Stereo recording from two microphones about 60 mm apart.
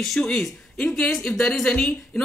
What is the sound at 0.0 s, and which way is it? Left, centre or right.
Speech, centre.